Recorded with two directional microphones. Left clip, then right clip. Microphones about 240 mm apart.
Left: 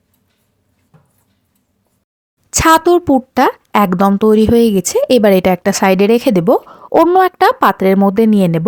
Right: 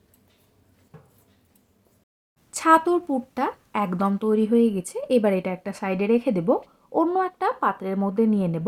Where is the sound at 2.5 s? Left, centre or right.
Left.